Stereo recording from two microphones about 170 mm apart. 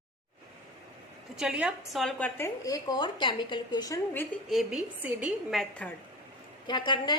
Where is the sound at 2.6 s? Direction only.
20° left (ahead or behind).